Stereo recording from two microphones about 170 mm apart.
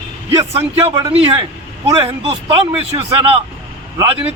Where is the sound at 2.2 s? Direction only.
35° right (ahead or behind).